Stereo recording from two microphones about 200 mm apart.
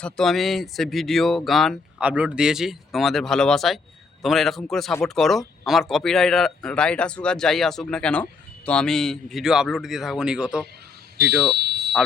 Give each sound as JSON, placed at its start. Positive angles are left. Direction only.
{"t": 0.0, "sound": "a man's voice", "side_deg": 0}
{"t": 11.2, "sound": "fire alarm", "side_deg": -55}